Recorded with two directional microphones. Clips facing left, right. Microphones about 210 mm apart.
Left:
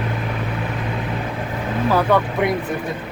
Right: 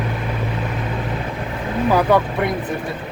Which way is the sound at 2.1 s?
10° right (ahead or behind).